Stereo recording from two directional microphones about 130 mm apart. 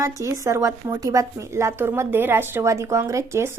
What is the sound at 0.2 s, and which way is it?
A woman's voice, 25° right (ahead or behind).